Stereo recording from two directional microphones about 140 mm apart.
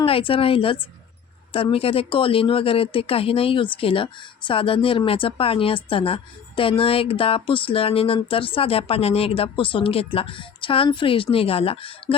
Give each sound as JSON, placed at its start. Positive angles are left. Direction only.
{"t": 0.0, "sound": "speech", "side_deg": 40}